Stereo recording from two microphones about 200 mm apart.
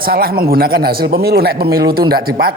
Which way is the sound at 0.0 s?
50° right (ahead or behind).